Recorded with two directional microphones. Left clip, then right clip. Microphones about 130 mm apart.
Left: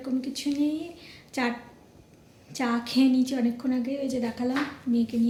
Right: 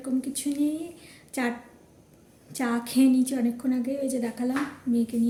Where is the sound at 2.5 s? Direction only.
30° right (ahead or behind).